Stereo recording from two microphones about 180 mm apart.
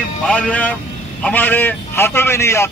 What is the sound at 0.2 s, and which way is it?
A man's voice, 5° left (ahead or behind).